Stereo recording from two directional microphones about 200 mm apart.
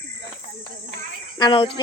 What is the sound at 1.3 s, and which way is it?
Speech, 20° left (ahead or behind).